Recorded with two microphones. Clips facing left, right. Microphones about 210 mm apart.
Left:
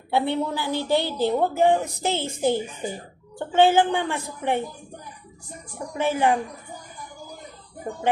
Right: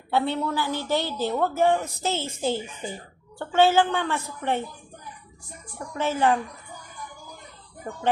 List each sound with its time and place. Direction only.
0.1 s a woman's voice: 15° left (ahead or behind)
5.9 s a woman's voice: 15° left (ahead or behind)